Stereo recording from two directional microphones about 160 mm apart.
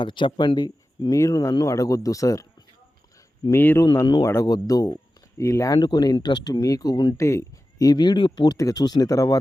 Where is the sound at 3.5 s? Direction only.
15° left (ahead or behind).